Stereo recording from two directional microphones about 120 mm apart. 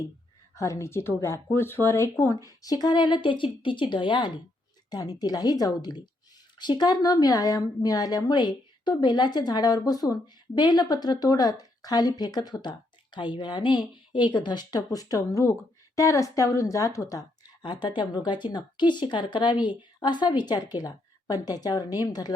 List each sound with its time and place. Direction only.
0.5 s speech: 25° left (ahead or behind)